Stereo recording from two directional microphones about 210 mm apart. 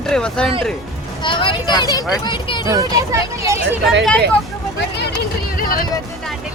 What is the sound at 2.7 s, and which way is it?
Speech, 15° right (ahead or behind).